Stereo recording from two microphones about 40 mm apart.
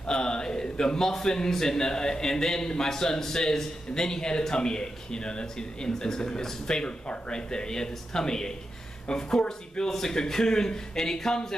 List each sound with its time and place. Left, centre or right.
0.0 s a man's voice: left